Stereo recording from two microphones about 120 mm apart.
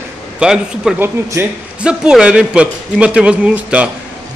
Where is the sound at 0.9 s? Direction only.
15° right (ahead or behind).